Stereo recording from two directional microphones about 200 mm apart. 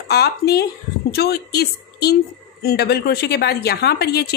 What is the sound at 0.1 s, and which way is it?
A woman's voice, 50° left (ahead or behind).